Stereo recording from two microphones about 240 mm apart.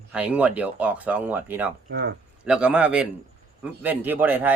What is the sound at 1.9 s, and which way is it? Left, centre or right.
Speech, right.